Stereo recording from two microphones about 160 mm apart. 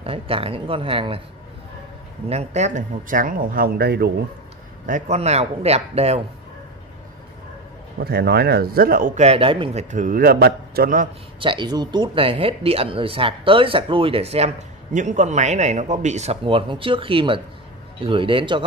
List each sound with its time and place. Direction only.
0.0 s speech: 35° right (ahead or behind)
2.2 s speech: 45° right (ahead or behind); by 4.1 s 90° right
4.8 s speech: 50° right (ahead or behind)
8.0 s speech: 90° right; by 9.2 s 60° right (ahead or behind)
9.2 s speech: 35° right (ahead or behind)
9.8 s speech: 55° right (ahead or behind)
11.3 s speech: 30° right (ahead or behind)